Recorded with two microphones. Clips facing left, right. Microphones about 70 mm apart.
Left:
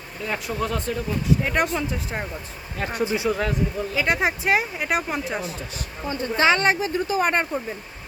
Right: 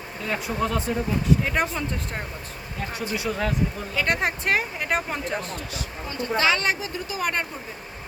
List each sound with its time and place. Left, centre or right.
0.3 s speech: centre
2.7 s speech: left
3.0 s speech: left
3.2 s speech: centre
3.9 s speech: centre
5.7 s speech: left